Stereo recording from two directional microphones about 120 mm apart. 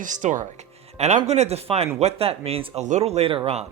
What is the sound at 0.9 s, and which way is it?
Speech, 65° right (ahead or behind).